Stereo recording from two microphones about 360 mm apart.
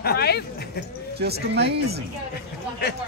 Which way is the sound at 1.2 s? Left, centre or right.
Right.